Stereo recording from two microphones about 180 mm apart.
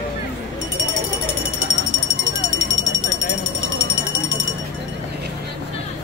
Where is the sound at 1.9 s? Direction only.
90° left.